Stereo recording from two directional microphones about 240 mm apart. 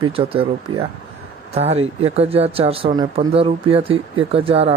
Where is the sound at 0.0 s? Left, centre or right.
Centre.